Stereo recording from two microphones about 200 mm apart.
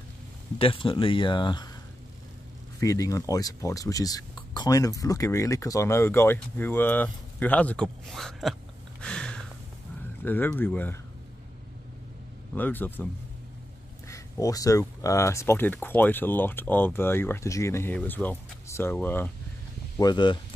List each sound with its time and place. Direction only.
0.6 s speech: 25° left (ahead or behind)
2.8 s speech: 15° left (ahead or behind); by 8.5 s centre (ahead or behind)
9.0 s a sound: 5° left (ahead or behind)
10.2 s speech: 10° left (ahead or behind)
12.5 s speech: 10° left (ahead or behind)
20.0 s speech: 20° left (ahead or behind)